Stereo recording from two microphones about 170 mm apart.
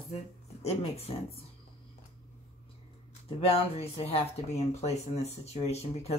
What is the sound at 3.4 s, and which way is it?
Speech, 35° left (ahead or behind).